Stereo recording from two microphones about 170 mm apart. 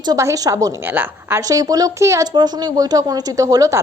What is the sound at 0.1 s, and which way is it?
A woman's voice, 20° right (ahead or behind).